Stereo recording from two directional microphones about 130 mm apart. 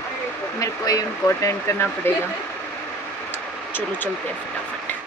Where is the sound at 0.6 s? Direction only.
25° left (ahead or behind).